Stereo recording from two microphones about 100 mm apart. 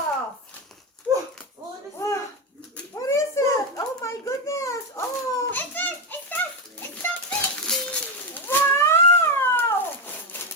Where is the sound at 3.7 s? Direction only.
30° left (ahead or behind).